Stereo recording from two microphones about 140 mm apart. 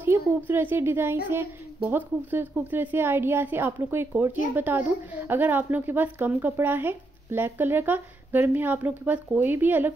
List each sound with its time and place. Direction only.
0.5 s speech: 15° right (ahead or behind)